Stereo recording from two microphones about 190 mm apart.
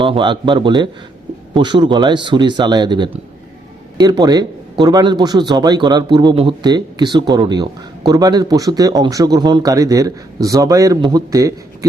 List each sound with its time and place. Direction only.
0.0 s speech: 25° right (ahead or behind)